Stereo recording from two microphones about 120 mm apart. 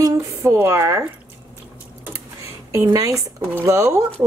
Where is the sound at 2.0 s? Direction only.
20° right (ahead or behind).